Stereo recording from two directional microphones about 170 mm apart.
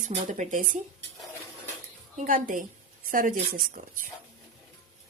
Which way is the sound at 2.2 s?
50° right (ahead or behind).